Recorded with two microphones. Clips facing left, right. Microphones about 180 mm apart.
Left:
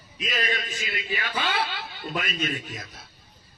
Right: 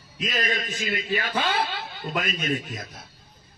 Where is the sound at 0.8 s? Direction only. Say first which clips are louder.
Right 5 dB; 40° right (ahead or behind).